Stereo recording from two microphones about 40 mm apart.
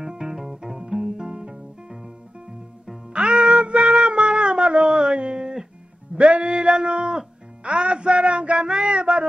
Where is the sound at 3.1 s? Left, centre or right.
Right.